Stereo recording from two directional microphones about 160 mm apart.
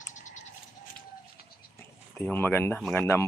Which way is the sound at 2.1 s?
10° left (ahead or behind).